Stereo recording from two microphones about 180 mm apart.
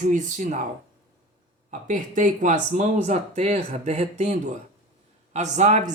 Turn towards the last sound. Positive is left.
turn(degrees=-40)  # may be behind; listen again after turning